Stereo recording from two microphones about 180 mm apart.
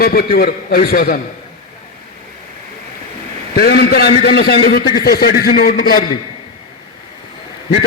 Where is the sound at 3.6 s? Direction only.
60° left (ahead or behind).